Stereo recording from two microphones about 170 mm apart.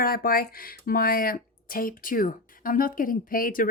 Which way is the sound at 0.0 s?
60° left (ahead or behind).